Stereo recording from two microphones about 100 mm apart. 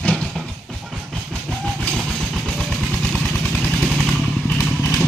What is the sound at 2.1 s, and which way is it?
Vehicle, centre (ahead or behind).